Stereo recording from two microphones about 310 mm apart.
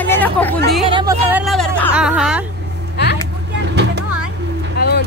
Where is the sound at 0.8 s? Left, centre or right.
Centre.